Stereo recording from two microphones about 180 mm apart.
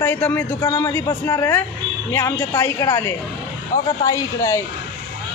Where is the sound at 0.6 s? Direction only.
20° left (ahead or behind).